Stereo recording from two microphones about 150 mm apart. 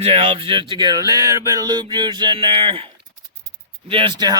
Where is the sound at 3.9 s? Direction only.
35° right (ahead or behind).